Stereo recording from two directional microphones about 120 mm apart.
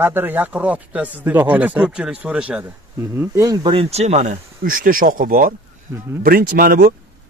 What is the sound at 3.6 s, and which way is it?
Speech, 55° right (ahead or behind).